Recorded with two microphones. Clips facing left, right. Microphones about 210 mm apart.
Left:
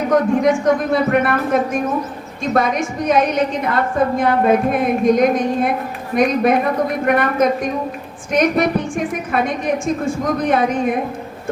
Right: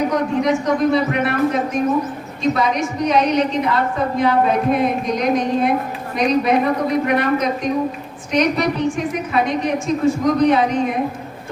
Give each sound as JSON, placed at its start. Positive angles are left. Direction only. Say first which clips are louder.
{"t": 0.1, "sound": "a woman's voice", "louder": "left 3 dB", "side_deg": 50}